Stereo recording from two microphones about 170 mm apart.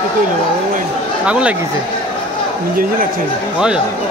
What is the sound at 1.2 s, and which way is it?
Speech, 5° right (ahead or behind).